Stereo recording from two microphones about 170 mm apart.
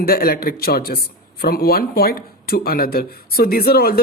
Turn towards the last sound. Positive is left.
turn(degrees=65)  # may be behind; listen again after turning